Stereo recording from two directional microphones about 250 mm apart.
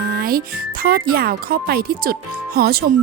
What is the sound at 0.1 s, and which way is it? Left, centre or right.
Speech, right.